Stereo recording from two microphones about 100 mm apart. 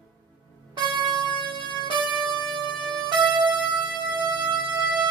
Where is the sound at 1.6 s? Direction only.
55° left (ahead or behind).